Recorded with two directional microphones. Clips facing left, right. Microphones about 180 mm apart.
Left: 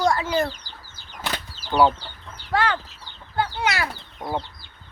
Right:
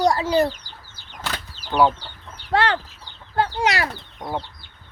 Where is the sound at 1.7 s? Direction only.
5° right (ahead or behind).